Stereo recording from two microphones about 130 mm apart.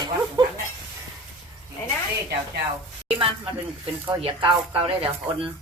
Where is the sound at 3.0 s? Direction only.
45° right (ahead or behind).